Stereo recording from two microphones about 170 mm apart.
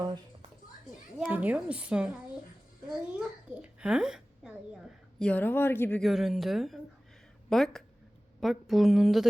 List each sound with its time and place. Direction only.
1.3 s a woman's voice: 10° right (ahead or behind)
5.2 s speech: 10° left (ahead or behind)
6.0 s speech: centre (ahead or behind)